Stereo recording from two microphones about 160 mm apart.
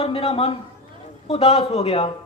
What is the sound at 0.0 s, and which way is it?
Speech, 35° left (ahead or behind).